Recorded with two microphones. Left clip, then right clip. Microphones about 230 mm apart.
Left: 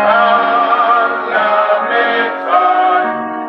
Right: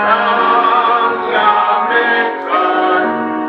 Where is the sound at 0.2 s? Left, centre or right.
Centre.